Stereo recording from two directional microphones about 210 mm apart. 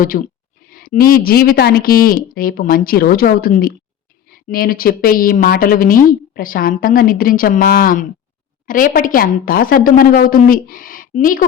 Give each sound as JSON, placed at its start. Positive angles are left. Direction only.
{"t": 0.0, "sound": "a woman's voice", "side_deg": 40}